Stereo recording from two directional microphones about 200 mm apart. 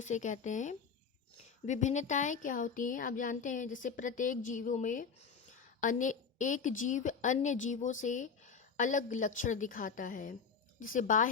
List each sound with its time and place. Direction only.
0.0 s a woman's voice: 35° left (ahead or behind)